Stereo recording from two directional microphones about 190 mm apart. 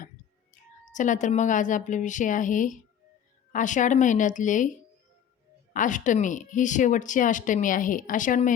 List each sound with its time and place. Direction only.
0.9 s speech: 40° left (ahead or behind)
5.7 s speech: 40° left (ahead or behind)